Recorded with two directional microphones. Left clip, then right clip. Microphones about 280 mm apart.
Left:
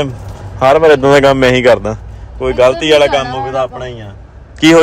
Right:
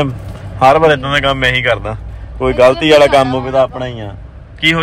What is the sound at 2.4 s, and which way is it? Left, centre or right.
Speech, centre.